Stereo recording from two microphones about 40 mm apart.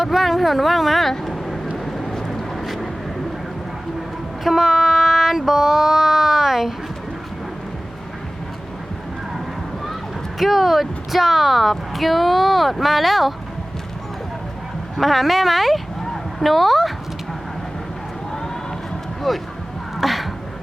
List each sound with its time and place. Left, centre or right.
0.0 s speech: centre
1.2 s vehicle: centre
4.4 s child singing: centre
9.8 s speech: centre
14.9 s speech: centre
19.3 s speech: centre
20.0 s a sound: centre